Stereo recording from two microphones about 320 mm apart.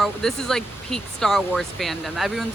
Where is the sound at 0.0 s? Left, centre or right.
Centre.